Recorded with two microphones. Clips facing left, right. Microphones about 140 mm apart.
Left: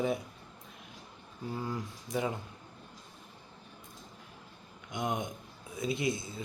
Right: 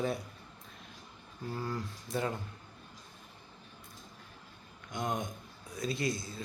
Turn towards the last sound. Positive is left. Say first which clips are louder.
# left 2 dB
turn(degrees=20)  # may be behind; listen again after turning